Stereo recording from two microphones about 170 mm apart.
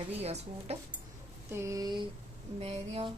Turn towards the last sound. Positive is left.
turn(degrees=-40)  # may be behind; listen again after turning